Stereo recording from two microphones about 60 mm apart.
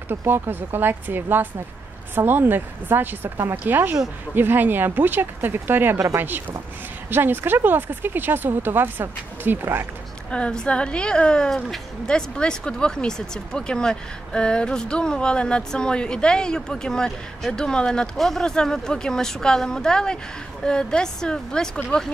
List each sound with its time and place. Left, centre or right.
0.1 s speech: right
10.3 s speech: centre
18.1 s speech: centre